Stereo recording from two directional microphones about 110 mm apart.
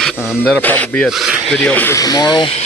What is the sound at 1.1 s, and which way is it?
Speech, centre (ahead or behind).